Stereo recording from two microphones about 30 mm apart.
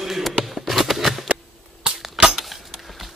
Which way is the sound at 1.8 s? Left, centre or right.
Right.